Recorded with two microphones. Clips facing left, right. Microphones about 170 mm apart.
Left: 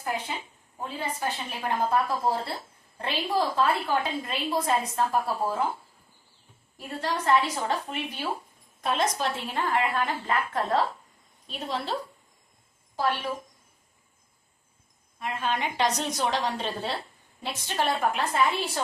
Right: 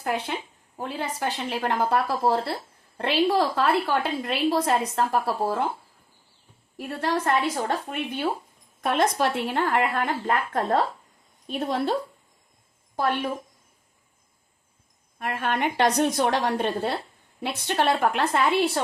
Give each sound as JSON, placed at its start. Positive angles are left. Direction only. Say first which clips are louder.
{"t": 0.0, "sound": "a woman's voice", "louder": "right 4 dB", "side_deg": -75}
{"t": 0.8, "sound": "a woman's voice", "louder": "right 3 dB", "side_deg": -85}
{"t": 6.7, "sound": "a woman's voice", "louder": "right 4 dB", "side_deg": -60}
{"t": 13.0, "sound": "a woman's voice", "louder": "right 3 dB", "side_deg": -55}
{"t": 15.2, "sound": "speech", "louder": "right 3 dB", "side_deg": -60}